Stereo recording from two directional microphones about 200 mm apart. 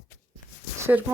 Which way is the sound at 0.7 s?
15° right (ahead or behind).